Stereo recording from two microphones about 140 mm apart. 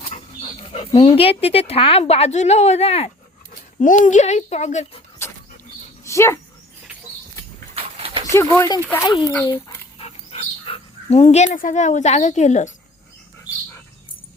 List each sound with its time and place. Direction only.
0.7 s speech: 40° left (ahead or behind)
3.8 s a child's voice: 65° left (ahead or behind); by 5.0 s 50° left (ahead or behind)
6.1 s speech: 20° left (ahead or behind)
7.8 s dog: 40° right (ahead or behind)
8.3 s speech: 20° left (ahead or behind)
10.0 s dog: 45° left (ahead or behind)
11.5 s a child's voice: 70° left (ahead or behind)